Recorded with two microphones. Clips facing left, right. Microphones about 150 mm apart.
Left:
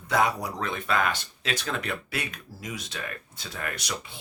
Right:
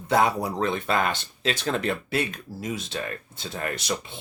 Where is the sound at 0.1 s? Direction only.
30° right (ahead or behind).